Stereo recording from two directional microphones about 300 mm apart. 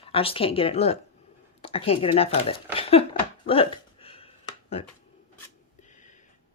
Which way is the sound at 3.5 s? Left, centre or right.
Centre.